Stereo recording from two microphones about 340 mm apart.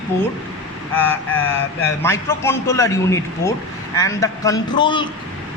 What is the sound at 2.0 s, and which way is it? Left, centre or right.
Speech, centre.